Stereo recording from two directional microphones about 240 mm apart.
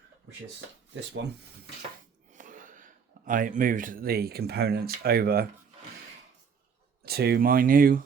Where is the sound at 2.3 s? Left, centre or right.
Right.